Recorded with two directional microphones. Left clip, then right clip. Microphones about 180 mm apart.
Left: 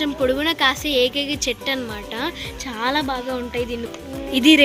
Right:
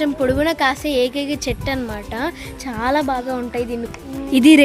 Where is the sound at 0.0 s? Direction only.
50° right (ahead or behind).